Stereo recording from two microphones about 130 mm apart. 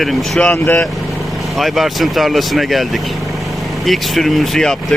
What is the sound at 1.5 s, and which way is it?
Speech, centre (ahead or behind).